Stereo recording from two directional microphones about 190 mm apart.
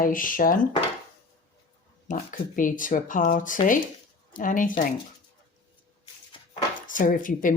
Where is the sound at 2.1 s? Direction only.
45° left (ahead or behind).